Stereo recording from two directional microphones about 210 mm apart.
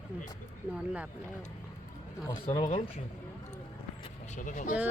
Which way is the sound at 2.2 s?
20° left (ahead or behind).